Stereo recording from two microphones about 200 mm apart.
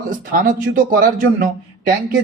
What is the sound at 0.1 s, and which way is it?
Speech, 45° right (ahead or behind).